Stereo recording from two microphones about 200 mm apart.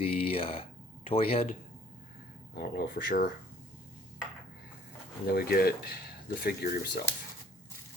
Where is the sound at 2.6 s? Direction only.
50° left (ahead or behind).